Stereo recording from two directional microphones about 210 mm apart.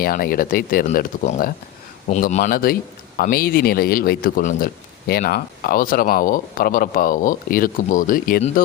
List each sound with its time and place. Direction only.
0.0 s speech: 45° left (ahead or behind)